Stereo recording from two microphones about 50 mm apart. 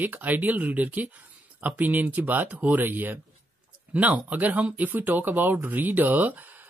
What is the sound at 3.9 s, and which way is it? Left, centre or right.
Speech, right.